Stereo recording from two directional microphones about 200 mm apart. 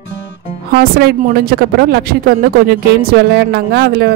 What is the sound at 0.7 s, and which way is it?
A man's voice, 50° right (ahead or behind).